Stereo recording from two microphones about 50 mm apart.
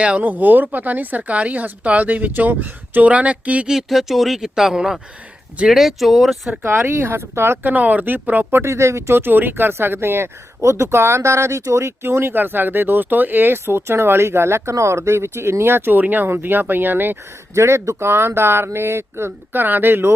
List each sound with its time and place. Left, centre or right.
0.2 s speech: right
3.7 s speech: centre
6.6 s speech: right
7.6 s speech: right
8.5 s speech: right
9.1 s speech: right
10.6 s speech: right
12.0 s speech: right
12.3 s speech: right
16.0 s speech: right
17.5 s speech: right
19.6 s speech: right